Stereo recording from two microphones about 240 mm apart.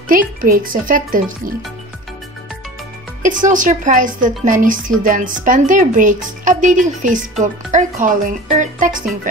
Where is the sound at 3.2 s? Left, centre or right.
Right.